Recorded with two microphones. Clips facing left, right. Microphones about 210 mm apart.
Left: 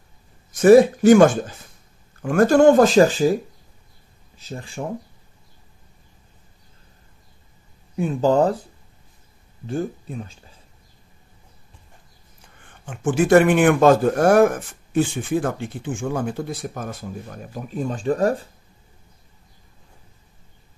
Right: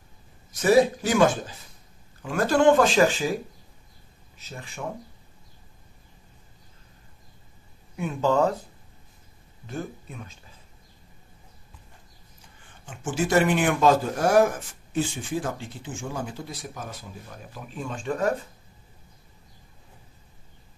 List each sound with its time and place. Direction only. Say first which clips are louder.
0.5 s speech: left 8 dB; 50° left (ahead or behind)
4.4 s speech: left 7 dB; 30° left (ahead or behind)
7.9 s speech: left 5 dB; 35° left (ahead or behind)
9.7 s speech: left 8 dB; 35° left (ahead or behind)
12.8 s speech: left 7 dB; 55° left (ahead or behind); by 18.5 s 40° left (ahead or behind)